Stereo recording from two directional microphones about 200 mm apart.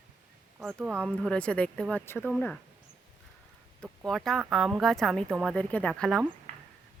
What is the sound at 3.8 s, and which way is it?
Speech, centre (ahead or behind).